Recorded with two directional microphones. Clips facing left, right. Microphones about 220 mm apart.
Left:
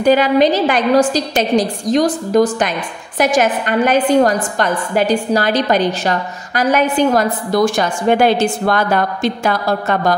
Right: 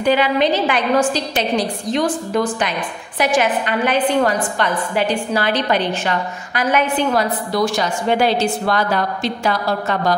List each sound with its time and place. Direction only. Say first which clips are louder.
0.0 s a woman's voice: left 4 dB; 40° left (ahead or behind)